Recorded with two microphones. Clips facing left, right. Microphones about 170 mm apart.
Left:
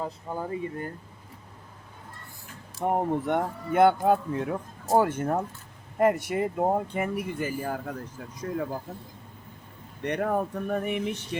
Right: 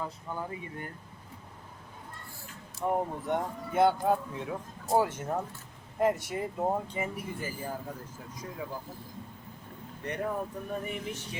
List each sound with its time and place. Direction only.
0.0 s speech: 35° left (ahead or behind)
2.8 s speech: 65° left (ahead or behind)
10.0 s speech: 75° left (ahead or behind)